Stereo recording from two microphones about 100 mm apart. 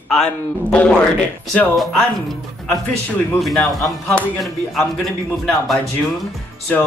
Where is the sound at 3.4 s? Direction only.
5° left (ahead or behind).